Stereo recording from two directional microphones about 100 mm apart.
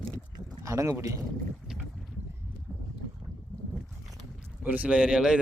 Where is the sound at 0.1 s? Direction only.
35° right (ahead or behind).